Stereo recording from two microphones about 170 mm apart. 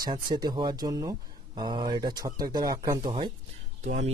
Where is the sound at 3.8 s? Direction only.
45° right (ahead or behind).